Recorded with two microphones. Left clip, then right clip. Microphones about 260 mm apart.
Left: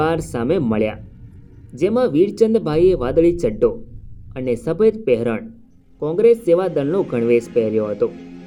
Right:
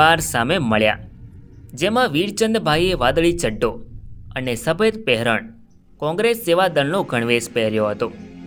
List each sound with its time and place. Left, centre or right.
0.0 s speech: right
2.0 s speech: right